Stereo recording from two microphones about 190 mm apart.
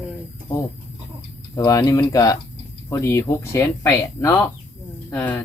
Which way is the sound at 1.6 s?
20° left (ahead or behind).